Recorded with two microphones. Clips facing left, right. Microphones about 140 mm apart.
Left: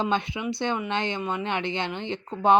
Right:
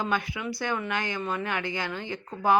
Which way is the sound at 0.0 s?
25° left (ahead or behind).